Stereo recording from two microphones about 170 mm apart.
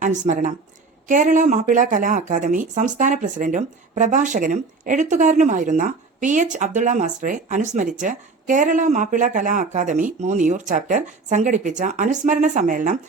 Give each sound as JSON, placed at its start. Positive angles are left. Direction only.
{"t": 0.0, "sound": "speech", "side_deg": -45}